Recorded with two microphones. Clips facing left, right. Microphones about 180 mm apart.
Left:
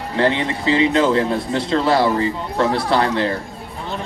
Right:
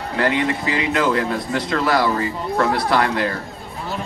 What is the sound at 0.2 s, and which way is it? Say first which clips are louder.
Speech: left 1 dB; 25° left (ahead or behind).